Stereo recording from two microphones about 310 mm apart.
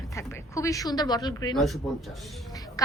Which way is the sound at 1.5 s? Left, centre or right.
Centre.